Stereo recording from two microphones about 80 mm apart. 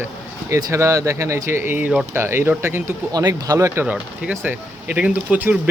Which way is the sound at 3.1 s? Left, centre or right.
Right.